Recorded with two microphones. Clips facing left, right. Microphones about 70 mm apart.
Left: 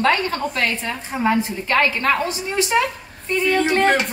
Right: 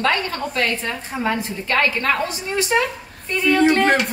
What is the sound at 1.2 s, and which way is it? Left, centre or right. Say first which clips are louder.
Speech: left 4 dB; left.